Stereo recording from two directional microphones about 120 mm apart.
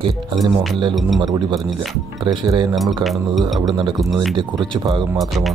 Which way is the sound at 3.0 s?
Centre (ahead or behind).